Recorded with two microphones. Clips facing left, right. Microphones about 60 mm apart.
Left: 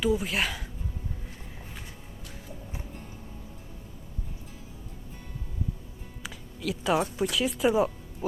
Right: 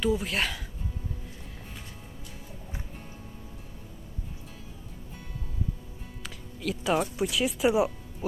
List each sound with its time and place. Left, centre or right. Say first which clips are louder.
0.0 s speech: left 1 dB; centre
6.6 s speech: left 1 dB; centre